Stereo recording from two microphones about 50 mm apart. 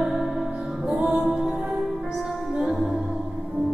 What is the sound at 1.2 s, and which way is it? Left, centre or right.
Music, centre.